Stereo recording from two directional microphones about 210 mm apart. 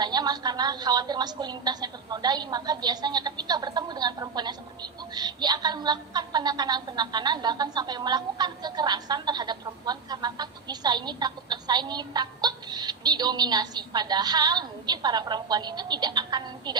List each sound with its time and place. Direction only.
0.0 s a woman's voice: 20° right (ahead or behind)